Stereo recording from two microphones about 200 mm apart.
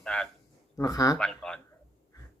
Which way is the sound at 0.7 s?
15° left (ahead or behind).